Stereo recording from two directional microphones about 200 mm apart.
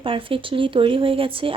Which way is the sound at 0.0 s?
25° right (ahead or behind).